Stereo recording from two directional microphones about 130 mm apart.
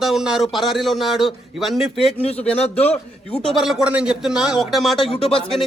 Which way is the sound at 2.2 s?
50° left (ahead or behind).